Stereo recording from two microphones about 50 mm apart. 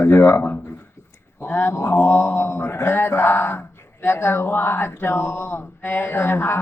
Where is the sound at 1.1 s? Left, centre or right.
Left.